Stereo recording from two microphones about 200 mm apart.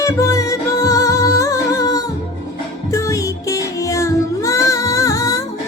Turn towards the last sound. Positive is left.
turn(degrees=15)  # may be behind; listen again after turning